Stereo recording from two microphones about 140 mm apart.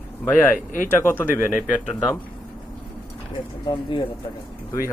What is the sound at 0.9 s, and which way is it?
Speech, 15° left (ahead or behind).